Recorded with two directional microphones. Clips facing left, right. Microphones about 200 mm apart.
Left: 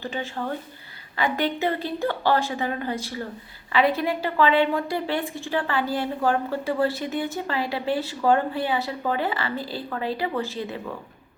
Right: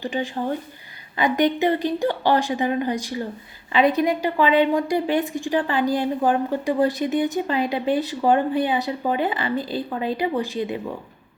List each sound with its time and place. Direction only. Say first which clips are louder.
0.0 s a woman's voice: right 4 dB; 15° right (ahead or behind)